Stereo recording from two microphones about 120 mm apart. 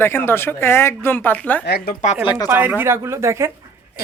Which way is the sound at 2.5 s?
15° right (ahead or behind).